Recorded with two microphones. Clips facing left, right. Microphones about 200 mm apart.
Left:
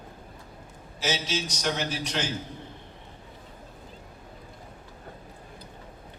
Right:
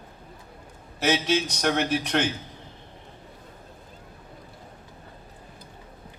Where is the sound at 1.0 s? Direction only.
60° right (ahead or behind).